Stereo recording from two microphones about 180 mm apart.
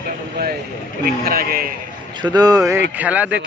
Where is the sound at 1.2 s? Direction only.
55° right (ahead or behind).